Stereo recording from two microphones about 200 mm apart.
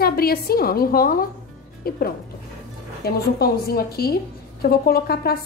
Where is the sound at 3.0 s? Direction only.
50° left (ahead or behind).